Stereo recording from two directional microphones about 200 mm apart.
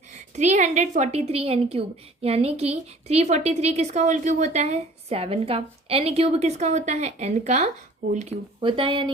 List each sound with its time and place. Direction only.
0.1 s a woman's voice: 35° right (ahead or behind)